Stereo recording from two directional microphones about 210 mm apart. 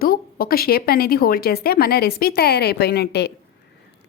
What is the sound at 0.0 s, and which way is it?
Speech, 45° left (ahead or behind).